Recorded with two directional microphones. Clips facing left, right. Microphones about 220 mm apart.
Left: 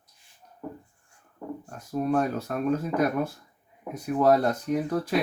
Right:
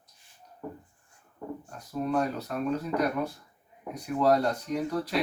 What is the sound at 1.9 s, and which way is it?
Speech, 45° left (ahead or behind).